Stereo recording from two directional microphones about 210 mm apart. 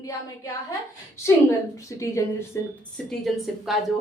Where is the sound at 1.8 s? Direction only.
15° left (ahead or behind).